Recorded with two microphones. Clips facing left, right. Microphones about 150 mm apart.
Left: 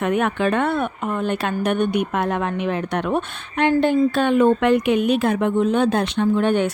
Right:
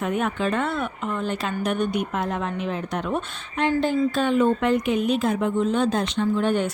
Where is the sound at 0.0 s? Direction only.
70° left (ahead or behind).